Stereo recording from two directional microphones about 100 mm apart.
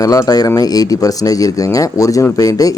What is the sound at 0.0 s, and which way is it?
A man's voice, 35° left (ahead or behind).